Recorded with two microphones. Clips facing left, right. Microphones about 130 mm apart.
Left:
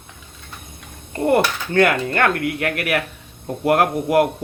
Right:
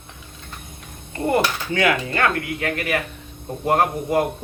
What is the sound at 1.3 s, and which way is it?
A man's voice, 60° left (ahead or behind).